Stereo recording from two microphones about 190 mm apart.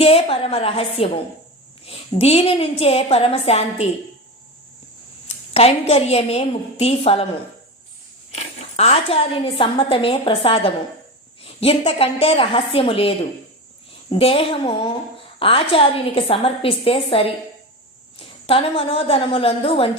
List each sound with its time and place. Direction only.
0.0 s a woman's voice: 30° left (ahead or behind)
5.5 s a woman's voice: 35° left (ahead or behind)
8.7 s a woman's voice: 30° left (ahead or behind)